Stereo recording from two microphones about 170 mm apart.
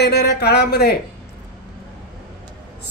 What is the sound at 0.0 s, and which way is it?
Speech, 70° left (ahead or behind).